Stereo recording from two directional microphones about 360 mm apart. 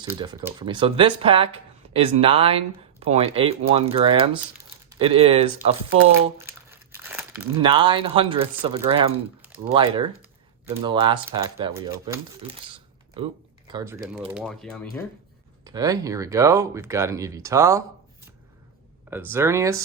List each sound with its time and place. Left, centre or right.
0.0 s speech: centre
15.6 s speech: centre
19.1 s speech: centre